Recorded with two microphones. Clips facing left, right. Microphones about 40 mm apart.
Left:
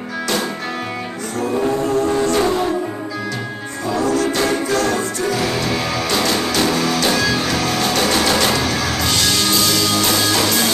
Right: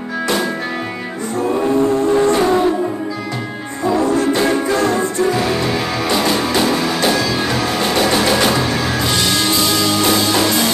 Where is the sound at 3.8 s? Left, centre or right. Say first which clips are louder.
Right 3 dB; right.